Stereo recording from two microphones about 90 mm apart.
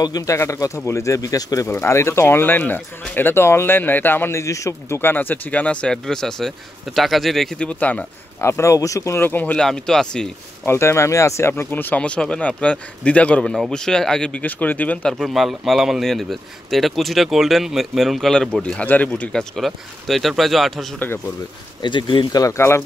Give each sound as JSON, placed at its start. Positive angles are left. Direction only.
{"t": 0.0, "sound": "speech", "side_deg": 45}
{"t": 1.7, "sound": "a man's voice", "side_deg": 30}
{"t": 7.6, "sound": "speech", "side_deg": 15}
{"t": 8.4, "sound": "speech", "side_deg": 30}
{"t": 9.2, "sound": "a man's voice", "side_deg": 20}
{"t": 9.6, "sound": "speech", "side_deg": 5}
{"t": 10.6, "sound": "speech", "side_deg": 30}
{"t": 15.1, "sound": "speech", "side_deg": 0}
{"t": 19.5, "sound": "speech", "side_deg": 0}
{"t": 21.8, "sound": "speech", "side_deg": 65}
{"t": 22.4, "sound": "speech", "side_deg": 30}